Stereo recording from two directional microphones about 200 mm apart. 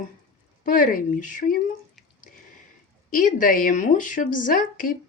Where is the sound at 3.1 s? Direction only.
40° left (ahead or behind).